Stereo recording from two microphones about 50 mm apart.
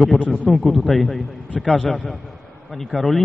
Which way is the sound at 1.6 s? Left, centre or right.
Centre.